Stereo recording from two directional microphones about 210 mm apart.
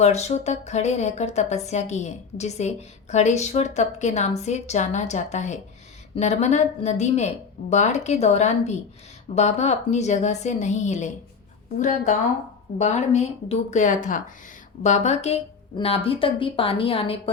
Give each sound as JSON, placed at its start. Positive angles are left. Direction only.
{"t": 0.0, "sound": "a woman's voice", "side_deg": 30}